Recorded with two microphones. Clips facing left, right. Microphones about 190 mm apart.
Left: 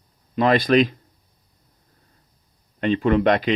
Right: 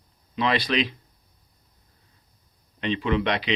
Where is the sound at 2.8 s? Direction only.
45° left (ahead or behind).